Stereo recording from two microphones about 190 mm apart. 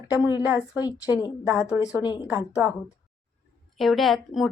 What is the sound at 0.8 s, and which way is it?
Speech, 20° left (ahead or behind).